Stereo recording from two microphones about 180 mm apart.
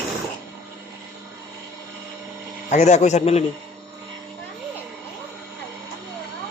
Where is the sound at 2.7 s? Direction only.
40° left (ahead or behind).